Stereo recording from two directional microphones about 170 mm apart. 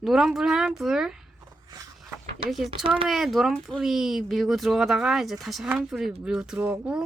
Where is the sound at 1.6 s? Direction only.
20° right (ahead or behind).